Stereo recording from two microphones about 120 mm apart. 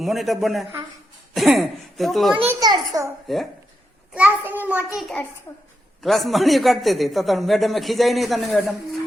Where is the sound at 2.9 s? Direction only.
25° right (ahead or behind).